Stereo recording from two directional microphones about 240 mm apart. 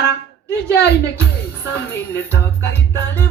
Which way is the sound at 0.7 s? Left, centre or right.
Left.